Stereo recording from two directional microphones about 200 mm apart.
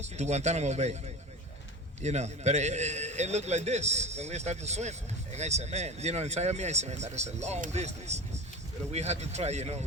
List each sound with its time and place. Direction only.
0.0 s a man's voice: 35° right (ahead or behind)